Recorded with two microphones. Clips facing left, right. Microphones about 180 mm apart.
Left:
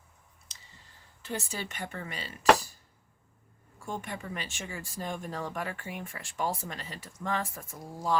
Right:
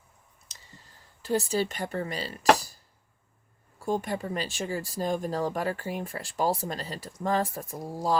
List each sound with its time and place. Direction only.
1.2 s speech: 35° right (ahead or behind)
3.8 s speech: 35° right (ahead or behind)